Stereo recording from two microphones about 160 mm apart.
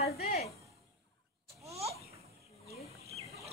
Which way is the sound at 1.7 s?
40° right (ahead or behind).